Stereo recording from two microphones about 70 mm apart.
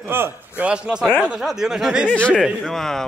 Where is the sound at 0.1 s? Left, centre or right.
Right.